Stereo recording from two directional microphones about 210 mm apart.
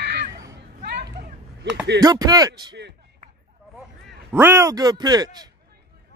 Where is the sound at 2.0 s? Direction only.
15° right (ahead or behind).